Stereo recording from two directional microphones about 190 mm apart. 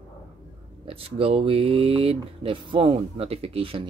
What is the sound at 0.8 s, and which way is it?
Speech, 30° right (ahead or behind).